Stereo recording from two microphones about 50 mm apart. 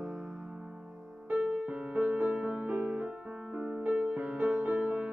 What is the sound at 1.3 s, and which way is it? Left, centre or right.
Music, centre.